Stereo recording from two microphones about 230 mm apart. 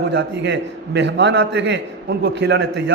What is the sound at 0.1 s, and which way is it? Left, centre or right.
A man's voice, right.